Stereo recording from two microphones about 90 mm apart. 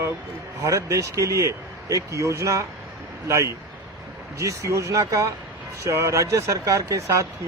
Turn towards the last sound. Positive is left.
turn(degrees=-35)  # may be behind; listen again after turning